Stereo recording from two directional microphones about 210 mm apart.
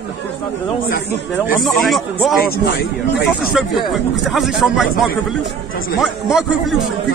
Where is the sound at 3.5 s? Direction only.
Centre (ahead or behind).